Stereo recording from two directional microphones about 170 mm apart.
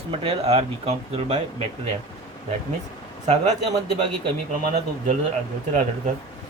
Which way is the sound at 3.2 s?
40° right (ahead or behind).